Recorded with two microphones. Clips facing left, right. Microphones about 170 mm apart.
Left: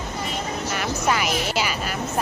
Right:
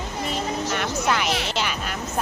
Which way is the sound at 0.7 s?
5° left (ahead or behind).